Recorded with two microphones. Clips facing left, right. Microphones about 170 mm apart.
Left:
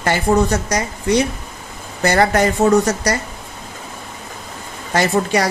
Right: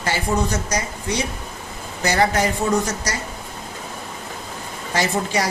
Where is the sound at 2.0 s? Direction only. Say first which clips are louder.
Left 4 dB; 60° left (ahead or behind).